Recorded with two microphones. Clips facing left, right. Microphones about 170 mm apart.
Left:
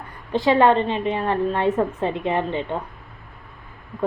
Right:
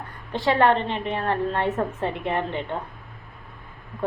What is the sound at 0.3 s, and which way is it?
A woman's voice, 15° left (ahead or behind).